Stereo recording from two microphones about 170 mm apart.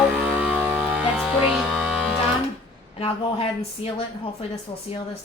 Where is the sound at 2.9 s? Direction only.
35° left (ahead or behind).